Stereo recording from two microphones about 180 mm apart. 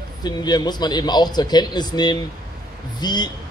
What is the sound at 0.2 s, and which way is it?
Speech, 25° left (ahead or behind).